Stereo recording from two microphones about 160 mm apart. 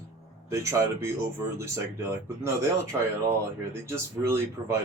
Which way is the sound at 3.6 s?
15° right (ahead or behind).